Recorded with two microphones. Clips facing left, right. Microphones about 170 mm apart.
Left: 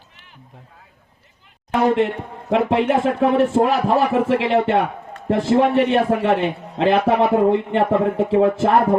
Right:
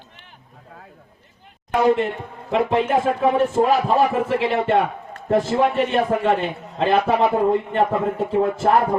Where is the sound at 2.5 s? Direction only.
70° left (ahead or behind).